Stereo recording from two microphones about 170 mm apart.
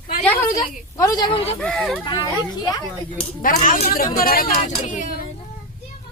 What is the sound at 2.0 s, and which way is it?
Speech, 30° left (ahead or behind).